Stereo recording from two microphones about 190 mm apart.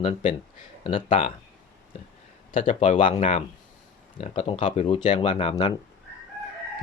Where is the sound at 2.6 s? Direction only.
40° left (ahead or behind).